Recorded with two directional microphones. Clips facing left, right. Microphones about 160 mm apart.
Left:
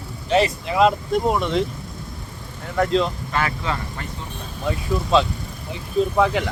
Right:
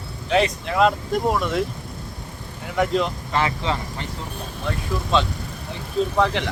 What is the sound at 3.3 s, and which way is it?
Speech, 25° right (ahead or behind).